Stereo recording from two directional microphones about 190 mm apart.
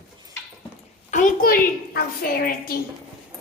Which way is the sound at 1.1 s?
45° left (ahead or behind).